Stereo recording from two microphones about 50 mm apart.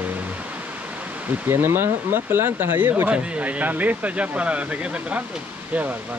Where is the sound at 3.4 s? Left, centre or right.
Right.